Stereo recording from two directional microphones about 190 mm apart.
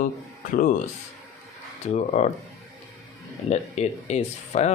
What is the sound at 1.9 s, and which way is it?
Speech, 35° left (ahead or behind).